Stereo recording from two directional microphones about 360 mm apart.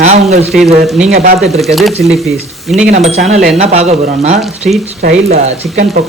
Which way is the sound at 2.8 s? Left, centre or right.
Centre.